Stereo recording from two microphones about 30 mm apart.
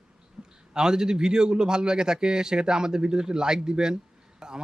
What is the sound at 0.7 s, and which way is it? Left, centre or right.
A man's voice, right.